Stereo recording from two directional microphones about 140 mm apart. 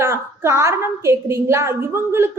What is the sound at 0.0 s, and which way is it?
A woman's voice, 20° right (ahead or behind).